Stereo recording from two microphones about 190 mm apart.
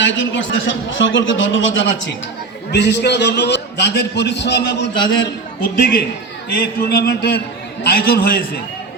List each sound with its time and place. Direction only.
0.0 s a man's voice: 80° left
2.7 s a man's voice: 65° left (ahead or behind)